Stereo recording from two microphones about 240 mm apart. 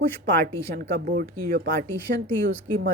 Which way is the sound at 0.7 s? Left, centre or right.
Right.